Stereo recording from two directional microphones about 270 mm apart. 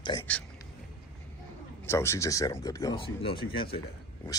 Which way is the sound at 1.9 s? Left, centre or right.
Centre.